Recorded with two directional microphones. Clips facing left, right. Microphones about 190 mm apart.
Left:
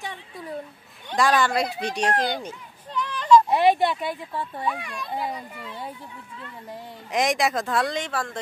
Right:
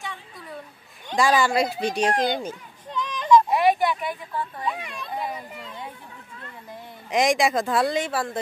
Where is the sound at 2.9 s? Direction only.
20° right (ahead or behind).